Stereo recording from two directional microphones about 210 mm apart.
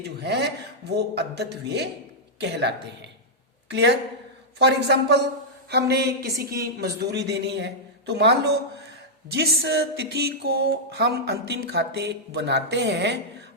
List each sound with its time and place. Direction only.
0.2 s a woman's voice: 55° right (ahead or behind)